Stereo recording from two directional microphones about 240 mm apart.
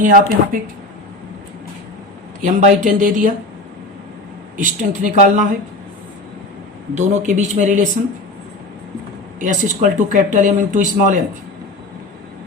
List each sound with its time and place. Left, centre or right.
0.0 s speech: right
2.4 s speech: right
4.5 s speech: right
6.9 s speech: right
9.4 s speech: right